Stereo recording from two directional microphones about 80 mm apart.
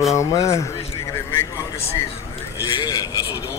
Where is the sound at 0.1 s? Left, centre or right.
Left.